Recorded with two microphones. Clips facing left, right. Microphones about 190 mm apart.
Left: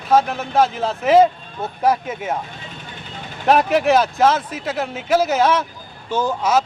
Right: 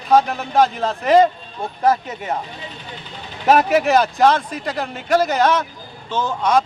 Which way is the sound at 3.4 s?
Centre (ahead or behind).